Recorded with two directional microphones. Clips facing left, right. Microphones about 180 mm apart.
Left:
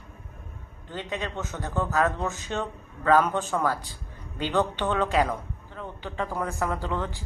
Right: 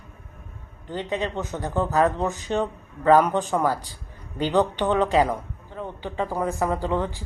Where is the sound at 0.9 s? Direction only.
15° right (ahead or behind).